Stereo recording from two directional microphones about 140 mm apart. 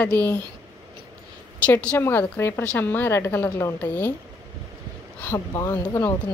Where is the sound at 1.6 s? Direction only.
10° left (ahead or behind).